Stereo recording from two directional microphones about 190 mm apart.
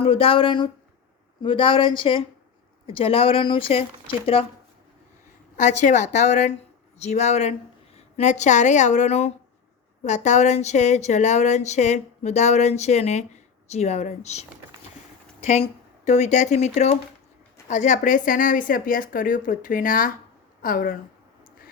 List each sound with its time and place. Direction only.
0.0 s speech: 30° left (ahead or behind)
5.5 s a woman's voice: 40° left (ahead or behind)